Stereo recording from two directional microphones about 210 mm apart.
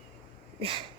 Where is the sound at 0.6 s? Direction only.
25° right (ahead or behind).